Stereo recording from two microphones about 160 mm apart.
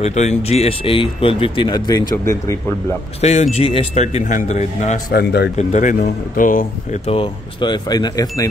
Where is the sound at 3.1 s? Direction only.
45° left (ahead or behind).